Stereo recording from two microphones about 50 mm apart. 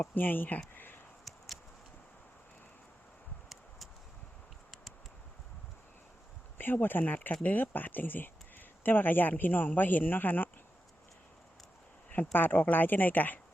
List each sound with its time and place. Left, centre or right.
0.1 s speech: left
0.7 s a sound: left
6.6 s speech: left
12.1 s speech: left